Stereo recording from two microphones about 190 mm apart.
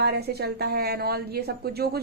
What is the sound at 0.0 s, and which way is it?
A woman's voice, 55° right (ahead or behind).